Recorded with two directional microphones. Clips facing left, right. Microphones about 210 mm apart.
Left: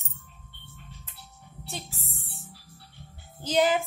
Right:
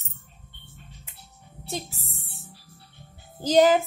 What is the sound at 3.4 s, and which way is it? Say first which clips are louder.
Speech: right 6 dB; 40° right (ahead or behind).